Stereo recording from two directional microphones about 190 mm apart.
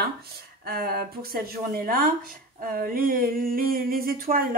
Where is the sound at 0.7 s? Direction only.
55° right (ahead or behind).